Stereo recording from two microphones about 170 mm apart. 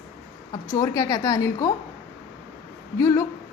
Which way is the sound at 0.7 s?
20° left (ahead or behind).